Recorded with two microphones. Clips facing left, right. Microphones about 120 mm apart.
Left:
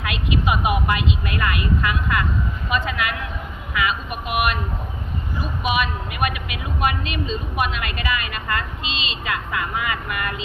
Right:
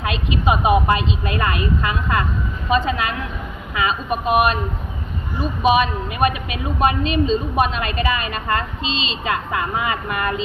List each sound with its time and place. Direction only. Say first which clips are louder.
0.0 s a woman's voice: right 3 dB; 30° right (ahead or behind)